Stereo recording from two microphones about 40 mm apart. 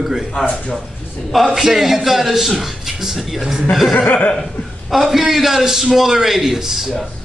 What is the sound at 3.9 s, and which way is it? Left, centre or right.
Speech, left.